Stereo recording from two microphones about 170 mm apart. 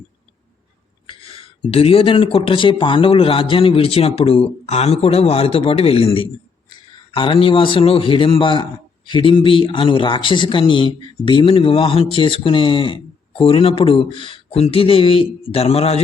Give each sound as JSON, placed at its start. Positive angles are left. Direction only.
{"t": 1.0, "sound": "speech", "side_deg": 35}